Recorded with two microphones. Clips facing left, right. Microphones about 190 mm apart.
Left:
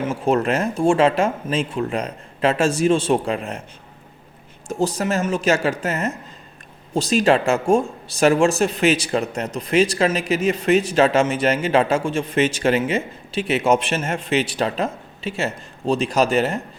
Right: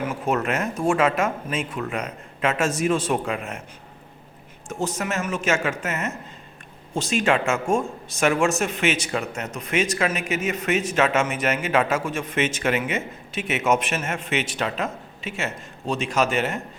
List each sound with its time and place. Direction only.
0.0 s speech: 30° left (ahead or behind)
4.7 s speech: 35° left (ahead or behind)